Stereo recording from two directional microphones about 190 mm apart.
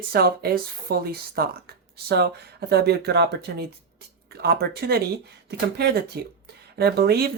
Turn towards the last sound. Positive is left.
turn(degrees=-55)  # may be behind; listen again after turning